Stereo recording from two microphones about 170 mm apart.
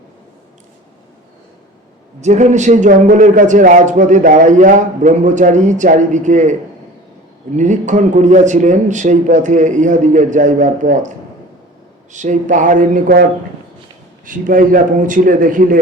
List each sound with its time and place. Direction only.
2.2 s a man's voice: 45° right (ahead or behind)
12.1 s a man's voice: 45° right (ahead or behind)
14.3 s a man's voice: 50° right (ahead or behind)